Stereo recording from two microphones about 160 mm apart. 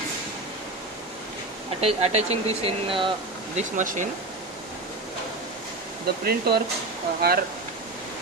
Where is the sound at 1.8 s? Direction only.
40° right (ahead or behind).